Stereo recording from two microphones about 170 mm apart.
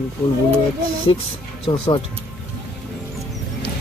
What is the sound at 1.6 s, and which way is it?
Speech, 30° left (ahead or behind).